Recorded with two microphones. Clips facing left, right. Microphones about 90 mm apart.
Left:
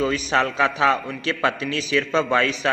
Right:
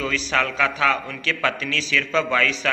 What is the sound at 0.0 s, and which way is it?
A man's voice, 20° left (ahead or behind).